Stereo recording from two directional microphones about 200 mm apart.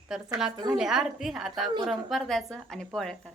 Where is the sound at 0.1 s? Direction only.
5° right (ahead or behind).